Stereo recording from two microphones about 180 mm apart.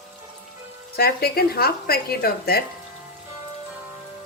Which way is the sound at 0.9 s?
60° left (ahead or behind).